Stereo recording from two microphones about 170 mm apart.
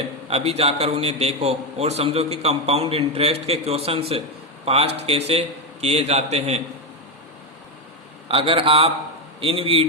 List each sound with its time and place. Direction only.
0.3 s a man's voice: 35° right (ahead or behind)
8.3 s a man's voice: 35° right (ahead or behind)